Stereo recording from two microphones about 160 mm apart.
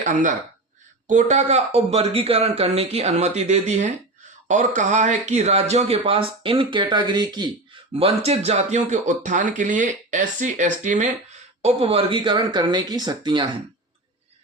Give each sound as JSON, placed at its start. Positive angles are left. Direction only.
{"t": 0.0, "sound": "speech", "side_deg": -50}
{"t": 7.9, "sound": "speech", "side_deg": -40}